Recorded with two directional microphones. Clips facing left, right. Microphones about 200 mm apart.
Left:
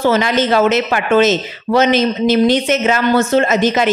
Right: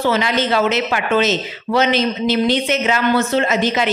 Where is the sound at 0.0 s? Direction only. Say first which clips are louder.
Left 4 dB; 45° left (ahead or behind).